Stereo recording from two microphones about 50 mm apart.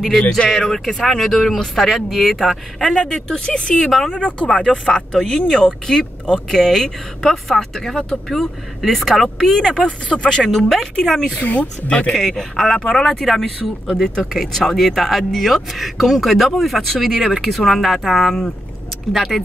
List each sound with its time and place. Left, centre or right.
0.5 s speech: centre
10.5 s speech: centre
11.3 s speech: left
12.1 s speech: centre
19.1 s speech: centre